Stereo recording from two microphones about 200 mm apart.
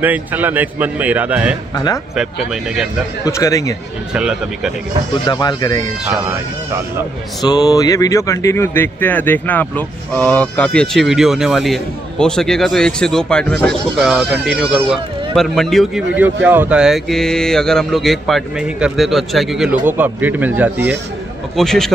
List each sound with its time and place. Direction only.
0.0 s a man's voice: 10° right (ahead or behind)
3.3 s speech: 15° left (ahead or behind)
4.1 s speech: 5° right (ahead or behind)
5.2 s speech: 20° left (ahead or behind)
7.4 s a man's voice: 20° left (ahead or behind); by 21.0 s 10° right (ahead or behind)
21.5 s speech: centre (ahead or behind)